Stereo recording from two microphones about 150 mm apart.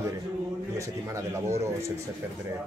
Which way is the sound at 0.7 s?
20° right (ahead or behind).